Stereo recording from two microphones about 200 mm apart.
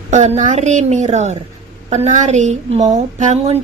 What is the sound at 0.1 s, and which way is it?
A woman's voice, 35° right (ahead or behind).